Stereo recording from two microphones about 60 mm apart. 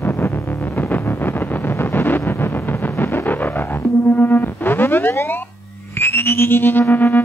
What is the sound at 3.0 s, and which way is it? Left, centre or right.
Music, left.